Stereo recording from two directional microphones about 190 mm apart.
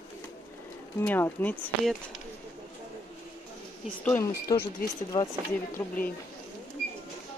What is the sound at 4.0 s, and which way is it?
Speech, 10° left (ahead or behind).